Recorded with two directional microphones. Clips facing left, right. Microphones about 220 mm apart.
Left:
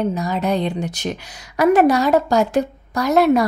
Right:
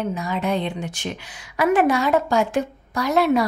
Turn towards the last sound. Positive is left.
turn(degrees=45)  # may be behind; listen again after turning